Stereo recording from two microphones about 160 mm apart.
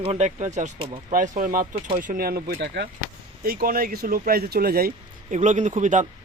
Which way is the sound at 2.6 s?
90° right.